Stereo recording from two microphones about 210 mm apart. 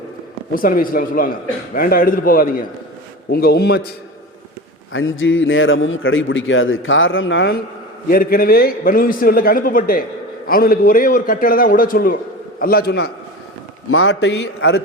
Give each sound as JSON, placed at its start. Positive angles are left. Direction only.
{"t": 0.5, "sound": "a man's voice", "side_deg": 40}
{"t": 4.9, "sound": "a man's voice", "side_deg": 70}
{"t": 8.1, "sound": "a man's voice", "side_deg": 45}
{"t": 13.9, "sound": "a man's voice", "side_deg": 75}